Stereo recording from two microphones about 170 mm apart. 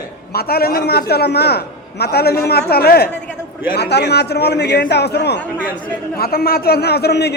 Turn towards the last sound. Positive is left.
turn(degrees=75)  # may be behind; listen again after turning